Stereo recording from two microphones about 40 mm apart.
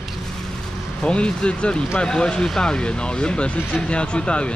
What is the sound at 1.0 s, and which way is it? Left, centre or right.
Speech, left.